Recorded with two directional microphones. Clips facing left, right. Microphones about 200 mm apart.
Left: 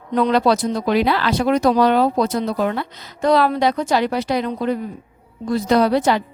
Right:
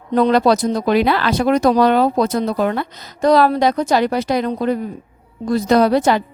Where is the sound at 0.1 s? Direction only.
40° right (ahead or behind).